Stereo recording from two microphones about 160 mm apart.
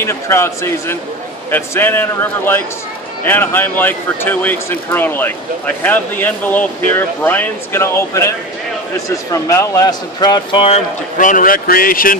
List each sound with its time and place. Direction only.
0.0 s speech: 15° left (ahead or behind)
9.3 s speech: 20° left (ahead or behind)
11.1 s a man's voice: 55° left (ahead or behind)